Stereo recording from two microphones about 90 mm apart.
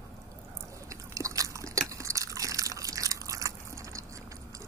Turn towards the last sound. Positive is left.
turn(degrees=-35)  # may be behind; listen again after turning